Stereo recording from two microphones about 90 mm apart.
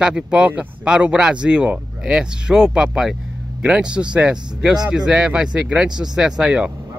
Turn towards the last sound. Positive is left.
turn(degrees=-5)  # may be behind; listen again after turning